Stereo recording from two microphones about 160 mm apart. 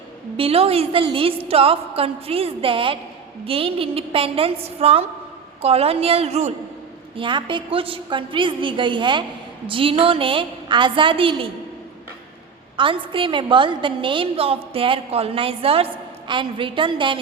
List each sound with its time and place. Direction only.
0.3 s a woman's voice: 35° right (ahead or behind)
7.2 s a woman's voice: 30° right (ahead or behind)
12.7 s a woman's voice: 30° right (ahead or behind)